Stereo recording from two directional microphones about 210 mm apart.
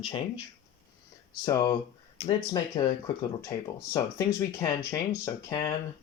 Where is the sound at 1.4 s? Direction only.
15° left (ahead or behind).